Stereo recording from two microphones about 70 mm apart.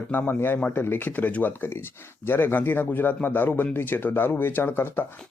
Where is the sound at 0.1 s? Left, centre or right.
Left.